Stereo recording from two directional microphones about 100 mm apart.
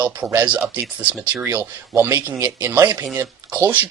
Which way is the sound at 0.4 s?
15° right (ahead or behind).